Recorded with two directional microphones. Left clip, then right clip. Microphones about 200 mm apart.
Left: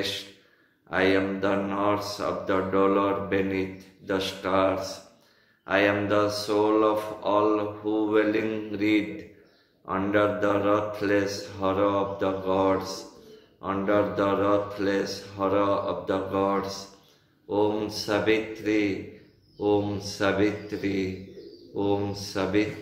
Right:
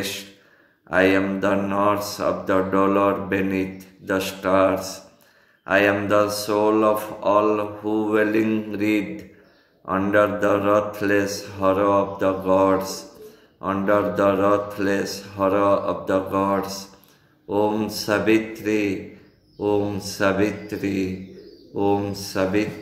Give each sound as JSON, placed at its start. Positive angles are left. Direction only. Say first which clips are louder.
{"t": 0.8, "sound": "mantra", "louder": "right 5 dB", "side_deg": -50}